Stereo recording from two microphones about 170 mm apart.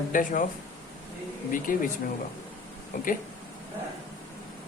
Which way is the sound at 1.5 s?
50° left (ahead or behind).